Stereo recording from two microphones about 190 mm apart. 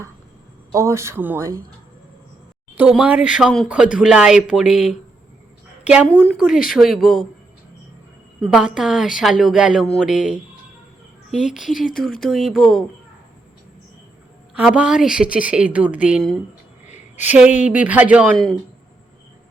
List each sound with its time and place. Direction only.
0.7 s speech: 15° right (ahead or behind)
2.7 s a woman's voice: 5° right (ahead or behind)
8.4 s a woman's voice: 5° right (ahead or behind)
11.7 s speech: 45° left (ahead or behind)
12.2 s a woman's voice: centre (ahead or behind)
14.5 s a woman's voice: 5° right (ahead or behind)